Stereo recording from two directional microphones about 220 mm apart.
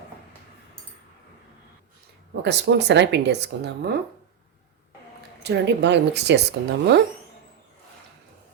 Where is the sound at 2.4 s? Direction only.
50° right (ahead or behind).